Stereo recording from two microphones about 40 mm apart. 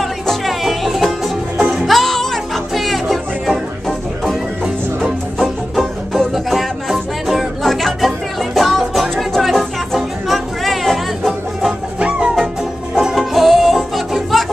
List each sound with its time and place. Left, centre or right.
0.0 s music: centre
1.9 s music: centre
5.4 s music: centre
12.0 s music: right
13.1 s music: centre